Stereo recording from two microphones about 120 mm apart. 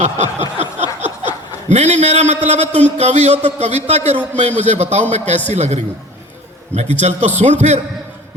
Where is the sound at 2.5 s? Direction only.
65° right (ahead or behind).